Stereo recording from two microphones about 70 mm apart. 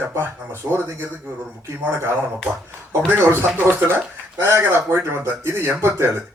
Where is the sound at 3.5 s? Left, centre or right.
Right.